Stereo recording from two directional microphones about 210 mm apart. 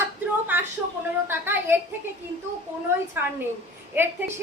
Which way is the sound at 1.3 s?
10° right (ahead or behind).